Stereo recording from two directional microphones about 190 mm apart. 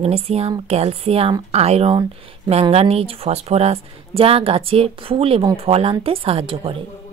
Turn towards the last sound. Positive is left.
turn(degrees=-30)  # may be behind; listen again after turning